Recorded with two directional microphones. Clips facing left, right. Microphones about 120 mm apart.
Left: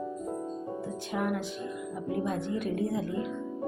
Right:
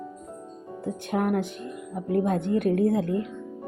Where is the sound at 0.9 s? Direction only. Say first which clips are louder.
Right 7 dB; 55° right (ahead or behind).